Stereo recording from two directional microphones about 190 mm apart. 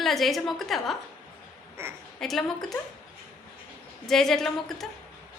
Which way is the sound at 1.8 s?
15° right (ahead or behind).